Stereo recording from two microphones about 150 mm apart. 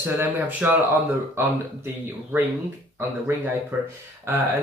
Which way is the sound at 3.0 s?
15° right (ahead or behind).